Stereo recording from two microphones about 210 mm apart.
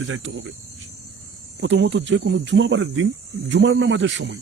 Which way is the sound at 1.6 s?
55° right (ahead or behind).